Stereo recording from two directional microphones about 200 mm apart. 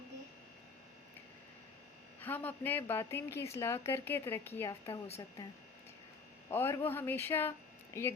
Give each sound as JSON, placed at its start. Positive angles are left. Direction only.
{"t": 2.2, "sound": "a woman's voice", "side_deg": 10}
{"t": 4.9, "sound": "a woman's voice", "side_deg": 30}
{"t": 6.5, "sound": "a woman's voice", "side_deg": 10}